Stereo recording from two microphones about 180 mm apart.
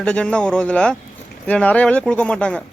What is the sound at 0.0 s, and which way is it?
Speech, 5° left (ahead or behind).